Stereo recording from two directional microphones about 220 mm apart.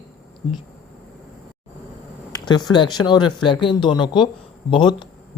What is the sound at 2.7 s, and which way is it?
Speech, 20° left (ahead or behind).